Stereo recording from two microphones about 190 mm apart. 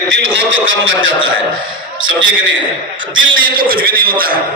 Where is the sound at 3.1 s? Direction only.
90° right.